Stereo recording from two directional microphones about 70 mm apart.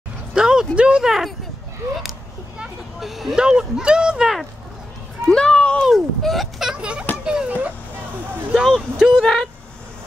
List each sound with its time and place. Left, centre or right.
0.3 s a sound: centre
0.7 s speech: centre
3.0 s speech: centre
5.3 s a sound: centre
5.8 s speech: centre
8.5 s speech: centre
9.2 s speech: centre